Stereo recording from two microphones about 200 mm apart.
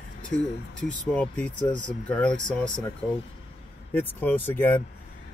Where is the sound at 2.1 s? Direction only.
5° left (ahead or behind).